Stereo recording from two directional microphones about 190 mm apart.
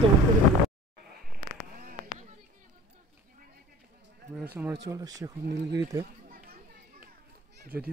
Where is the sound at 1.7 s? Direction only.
50° right (ahead or behind).